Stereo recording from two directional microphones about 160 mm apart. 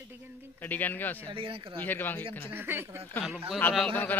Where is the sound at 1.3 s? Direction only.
35° right (ahead or behind).